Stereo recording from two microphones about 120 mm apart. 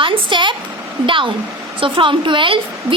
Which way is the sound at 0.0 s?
45° right (ahead or behind).